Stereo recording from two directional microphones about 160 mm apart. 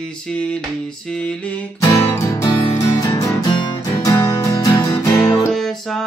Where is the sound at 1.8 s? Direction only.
15° left (ahead or behind).